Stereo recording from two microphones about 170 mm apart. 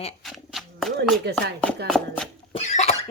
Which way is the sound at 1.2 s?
70° right (ahead or behind).